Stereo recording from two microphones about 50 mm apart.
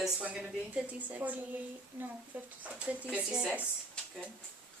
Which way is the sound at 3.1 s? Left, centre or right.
Right.